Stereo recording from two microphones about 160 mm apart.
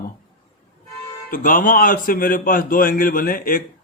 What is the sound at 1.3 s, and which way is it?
A man's voice, 60° left (ahead or behind).